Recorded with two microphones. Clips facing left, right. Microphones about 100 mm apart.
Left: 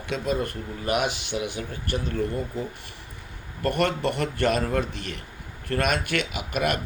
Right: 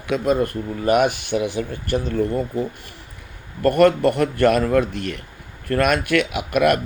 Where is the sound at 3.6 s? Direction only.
50° right (ahead or behind).